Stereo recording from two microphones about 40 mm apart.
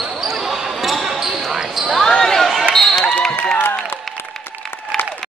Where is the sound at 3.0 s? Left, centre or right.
Left.